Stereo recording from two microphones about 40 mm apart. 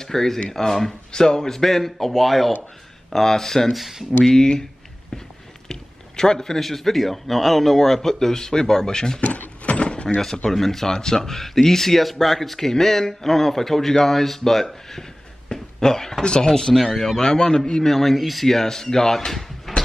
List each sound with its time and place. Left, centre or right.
0.0 s speech: centre
3.7 s speech: centre
4.2 s speech: centre
5.7 s a sound: centre
6.6 s speech: centre
9.2 s door: left
9.8 s door: left
10.5 s speech: centre
17.8 s speech: centre